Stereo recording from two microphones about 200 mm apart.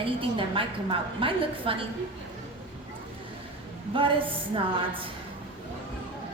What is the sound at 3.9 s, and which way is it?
A woman's voice, 25° right (ahead or behind).